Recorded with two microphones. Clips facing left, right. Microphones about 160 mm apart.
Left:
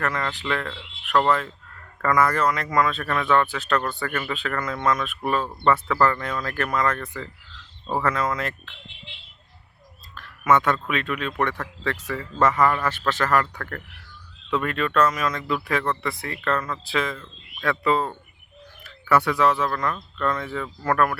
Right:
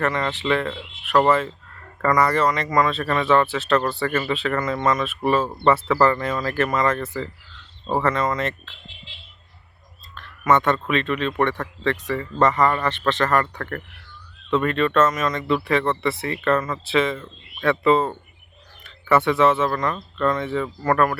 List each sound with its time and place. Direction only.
0.0 s speech: centre (ahead or behind)
9.1 s speech: 60° left (ahead or behind)
10.2 s speech: 5° left (ahead or behind)